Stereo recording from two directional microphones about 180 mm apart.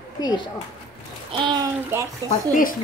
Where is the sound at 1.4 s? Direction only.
25° right (ahead or behind).